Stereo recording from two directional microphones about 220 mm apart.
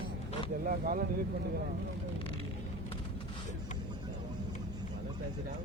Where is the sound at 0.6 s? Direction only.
40° right (ahead or behind).